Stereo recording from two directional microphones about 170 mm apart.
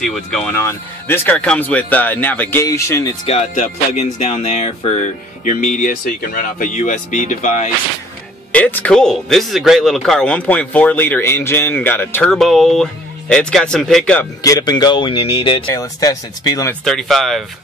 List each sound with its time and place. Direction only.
0.0 s speech: centre (ahead or behind)
0.6 s speech: 15° left (ahead or behind)
3.3 s speech: 40° left (ahead or behind)
5.4 s speech: 50° left (ahead or behind)
8.5 s speech: 10° left (ahead or behind)
14.4 s speech: 20° left (ahead or behind)
15.7 s speech: 20° left (ahead or behind)
16.8 s speech: centre (ahead or behind)